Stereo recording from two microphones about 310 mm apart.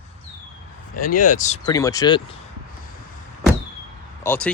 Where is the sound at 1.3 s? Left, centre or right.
Left.